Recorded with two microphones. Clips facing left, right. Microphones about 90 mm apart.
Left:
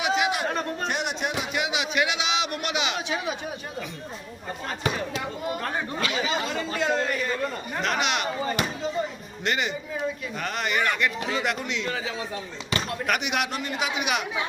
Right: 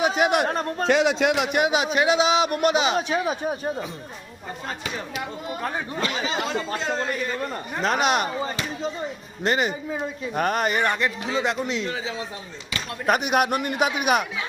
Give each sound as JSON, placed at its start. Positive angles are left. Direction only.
{"t": 0.0, "sound": "a sound", "side_deg": -50}
{"t": 0.4, "sound": "speech", "side_deg": -35}
{"t": 1.2, "sound": "speech", "side_deg": -90}
{"t": 1.5, "sound": "speech", "side_deg": -45}
{"t": 6.0, "sound": "speech", "side_deg": -40}
{"t": 6.7, "sound": "a sound", "side_deg": -30}
{"t": 7.8, "sound": "speech", "side_deg": -40}
{"t": 9.4, "sound": "a man's voice", "side_deg": -40}